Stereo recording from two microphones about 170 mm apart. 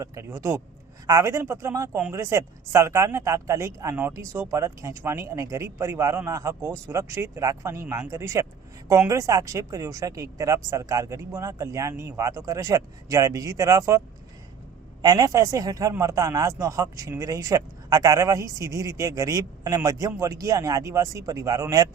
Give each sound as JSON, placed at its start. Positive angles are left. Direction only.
{"t": 0.0, "sound": "speech", "side_deg": -15}
{"t": 15.0, "sound": "a man's voice", "side_deg": -20}